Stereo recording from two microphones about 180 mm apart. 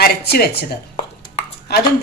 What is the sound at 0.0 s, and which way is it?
Speech, 60° left (ahead or behind).